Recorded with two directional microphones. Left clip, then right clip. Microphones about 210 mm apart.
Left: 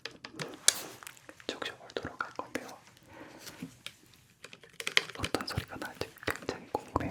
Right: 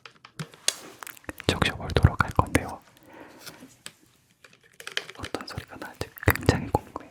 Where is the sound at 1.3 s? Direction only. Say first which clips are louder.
Right 13 dB; 55° right (ahead or behind).